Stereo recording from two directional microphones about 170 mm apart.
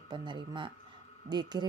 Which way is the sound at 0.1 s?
25° right (ahead or behind).